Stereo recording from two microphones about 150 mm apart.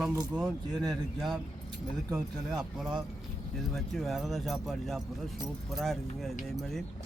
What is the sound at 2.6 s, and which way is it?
Speech, centre (ahead or behind).